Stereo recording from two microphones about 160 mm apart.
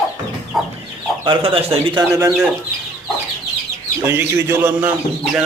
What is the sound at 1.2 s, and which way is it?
Speech, 30° right (ahead or behind).